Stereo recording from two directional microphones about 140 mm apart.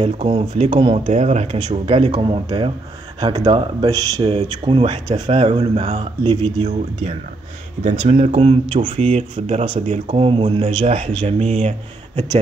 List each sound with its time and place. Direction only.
0.0 s speech: 45° right (ahead or behind)
1.0 s speech: 55° right (ahead or behind)
8.0 s speech: 50° right (ahead or behind)
9.1 s speech: 50° right (ahead or behind)